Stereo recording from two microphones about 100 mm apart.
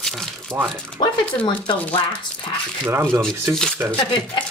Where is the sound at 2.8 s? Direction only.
20° right (ahead or behind).